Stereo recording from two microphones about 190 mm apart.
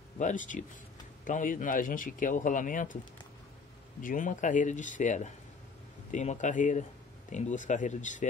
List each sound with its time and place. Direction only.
0.2 s speech: 40° left (ahead or behind)
4.0 s speech: 45° left (ahead or behind)